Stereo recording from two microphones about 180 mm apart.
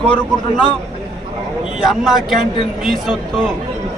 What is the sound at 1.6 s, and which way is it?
A man's voice, centre (ahead or behind).